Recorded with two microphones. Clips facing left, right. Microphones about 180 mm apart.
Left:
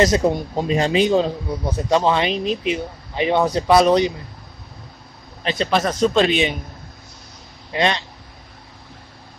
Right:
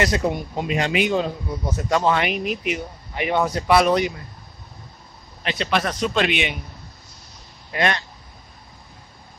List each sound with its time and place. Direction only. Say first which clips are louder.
0.0 s speech: left 5 dB; 25° left (ahead or behind)
5.4 s a man's voice: left 3 dB; 30° left (ahead or behind)
7.7 s speech: left 2 dB; 25° left (ahead or behind)